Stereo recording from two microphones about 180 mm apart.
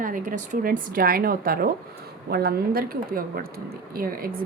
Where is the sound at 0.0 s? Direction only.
50° right (ahead or behind).